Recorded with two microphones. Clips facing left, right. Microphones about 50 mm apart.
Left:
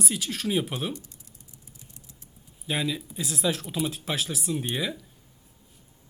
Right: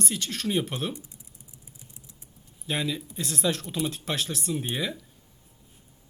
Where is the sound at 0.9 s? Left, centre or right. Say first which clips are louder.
Left 1 dB; right.